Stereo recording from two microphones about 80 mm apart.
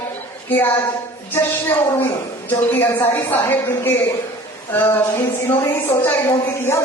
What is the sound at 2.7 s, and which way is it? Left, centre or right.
A woman's voice, left.